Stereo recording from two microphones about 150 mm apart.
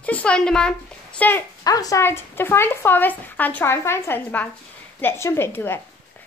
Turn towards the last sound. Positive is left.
turn(degrees=15)  # may be behind; listen again after turning